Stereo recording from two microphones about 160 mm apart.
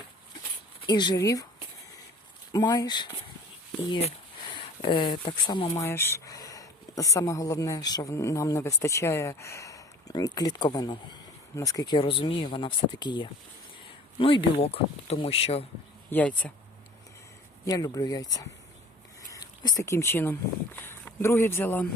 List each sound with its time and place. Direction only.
0.9 s speech: 25° left (ahead or behind)
2.5 s speech: 25° left (ahead or behind)
4.5 s speech: 35° left (ahead or behind)
5.7 s speech: 15° left (ahead or behind); by 15.6 s 40° left (ahead or behind)
16.0 s speech: 10° left (ahead or behind)
17.7 s speech: 25° left (ahead or behind)